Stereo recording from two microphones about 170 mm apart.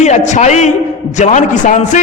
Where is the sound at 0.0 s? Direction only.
45° left (ahead or behind).